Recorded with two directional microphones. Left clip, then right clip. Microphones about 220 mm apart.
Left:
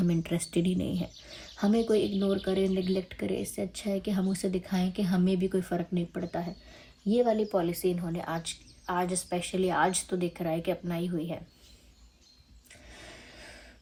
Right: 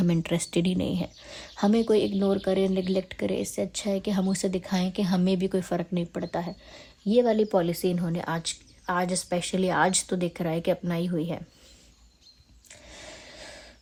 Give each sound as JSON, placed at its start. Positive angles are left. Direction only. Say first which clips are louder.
{"t": 0.0, "sound": "a woman's voice", "louder": "right 4 dB", "side_deg": -40}
{"t": 12.9, "sound": "snort", "louder": "right 4 dB", "side_deg": -40}